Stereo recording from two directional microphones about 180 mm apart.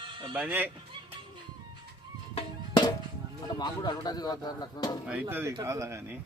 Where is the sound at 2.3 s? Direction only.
25° left (ahead or behind).